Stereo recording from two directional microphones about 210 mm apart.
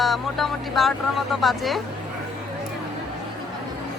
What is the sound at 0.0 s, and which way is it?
A woman's voice, centre (ahead or behind).